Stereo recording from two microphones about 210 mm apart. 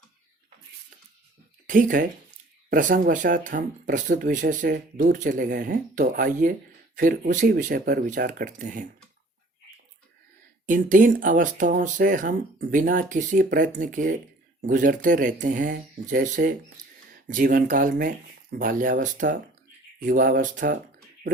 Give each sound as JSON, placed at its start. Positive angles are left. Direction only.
{"t": 1.6, "sound": "speech", "side_deg": -40}
{"t": 10.7, "sound": "speech", "side_deg": -40}